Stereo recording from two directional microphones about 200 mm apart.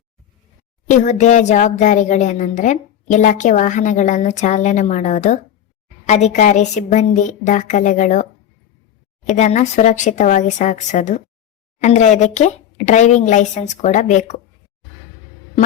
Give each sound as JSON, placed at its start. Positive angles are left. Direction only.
{"t": 0.9, "sound": "speech", "side_deg": 35}